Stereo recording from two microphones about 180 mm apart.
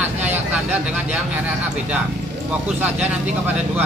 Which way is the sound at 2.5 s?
10° right (ahead or behind).